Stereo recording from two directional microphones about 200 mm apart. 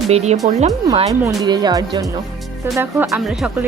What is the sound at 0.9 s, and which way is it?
Speech, 20° right (ahead or behind).